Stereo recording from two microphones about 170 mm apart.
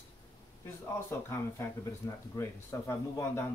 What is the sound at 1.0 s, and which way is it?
A man's voice, 15° left (ahead or behind).